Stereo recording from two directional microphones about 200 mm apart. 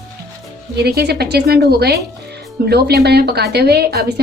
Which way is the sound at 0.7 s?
55° right (ahead or behind).